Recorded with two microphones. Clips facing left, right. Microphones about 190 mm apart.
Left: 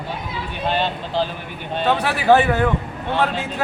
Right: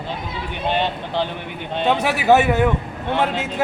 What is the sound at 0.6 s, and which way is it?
A man's voice, 20° right (ahead or behind).